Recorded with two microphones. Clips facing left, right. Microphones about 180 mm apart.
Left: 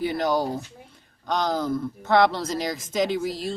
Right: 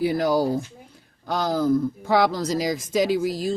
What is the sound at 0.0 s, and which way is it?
Speech, 5° right (ahead or behind).